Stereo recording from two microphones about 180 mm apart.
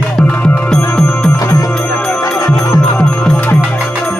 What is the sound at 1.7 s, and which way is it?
Music, 5° left (ahead or behind).